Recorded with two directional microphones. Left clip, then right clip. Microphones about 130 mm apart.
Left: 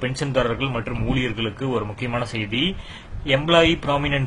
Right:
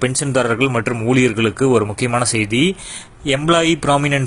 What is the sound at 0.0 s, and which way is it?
Speech, 55° right (ahead or behind).